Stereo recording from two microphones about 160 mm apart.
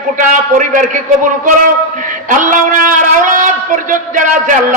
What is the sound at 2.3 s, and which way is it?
A man's voice, 55° right (ahead or behind).